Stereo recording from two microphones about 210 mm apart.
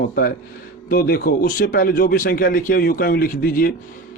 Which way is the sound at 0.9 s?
45° left (ahead or behind).